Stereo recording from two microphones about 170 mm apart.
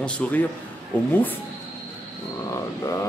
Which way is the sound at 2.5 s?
20° left (ahead or behind).